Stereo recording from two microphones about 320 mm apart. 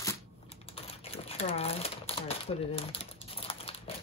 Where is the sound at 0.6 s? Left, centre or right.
Centre.